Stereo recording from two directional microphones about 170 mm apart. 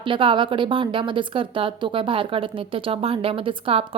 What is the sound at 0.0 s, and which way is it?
A woman's voice, 30° right (ahead or behind).